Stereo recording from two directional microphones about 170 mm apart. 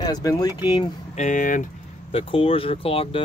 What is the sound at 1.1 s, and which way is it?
Speech, 45° left (ahead or behind).